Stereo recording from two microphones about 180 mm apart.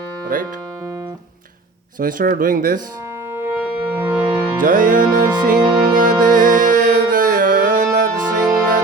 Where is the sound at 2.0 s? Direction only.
50° right (ahead or behind).